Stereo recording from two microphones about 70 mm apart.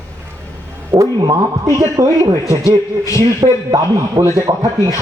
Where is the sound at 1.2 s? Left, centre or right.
Right.